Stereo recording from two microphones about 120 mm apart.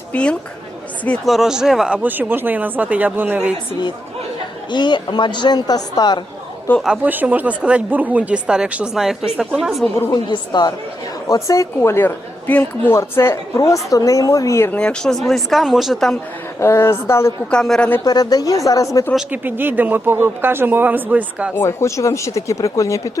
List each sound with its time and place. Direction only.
0.1 s a woman's voice: 10° left (ahead or behind)
1.2 s speech: centre (ahead or behind)
2.0 s speech: 15° right (ahead or behind)
4.7 s a man's voice: 40° left (ahead or behind)
6.8 s speech: 5° right (ahead or behind)
10.1 s a man's voice: 40° left (ahead or behind)
11.3 s a woman's voice: 25° left (ahead or behind)
14.7 s speech: 10° left (ahead or behind)
16.6 s a woman's voice: 20° left (ahead or behind)
17.5 s a woman's voice: 5° left (ahead or behind)
18.0 s a woman's voice: 30° left (ahead or behind)
19.3 s speech: 15° right (ahead or behind)
21.5 s a woman's voice: 20° left (ahead or behind)